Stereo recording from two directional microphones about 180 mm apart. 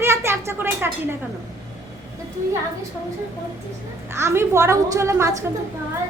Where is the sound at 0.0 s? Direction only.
15° right (ahead or behind).